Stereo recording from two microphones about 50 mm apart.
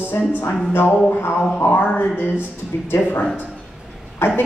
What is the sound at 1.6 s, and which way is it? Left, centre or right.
Speech, left.